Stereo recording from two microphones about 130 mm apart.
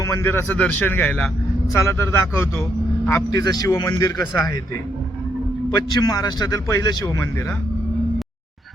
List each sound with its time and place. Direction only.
0.0 s a man's voice: 20° left (ahead or behind)
6.0 s a man's voice: 30° left (ahead or behind)